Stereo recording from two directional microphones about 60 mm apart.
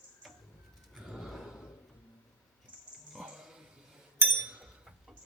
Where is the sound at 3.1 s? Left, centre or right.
Centre.